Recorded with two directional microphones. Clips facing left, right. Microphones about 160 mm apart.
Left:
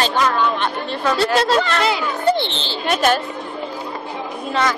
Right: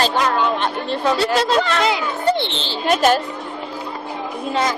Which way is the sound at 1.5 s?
Centre (ahead or behind).